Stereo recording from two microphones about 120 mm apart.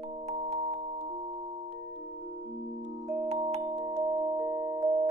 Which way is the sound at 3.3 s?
60° right (ahead or behind).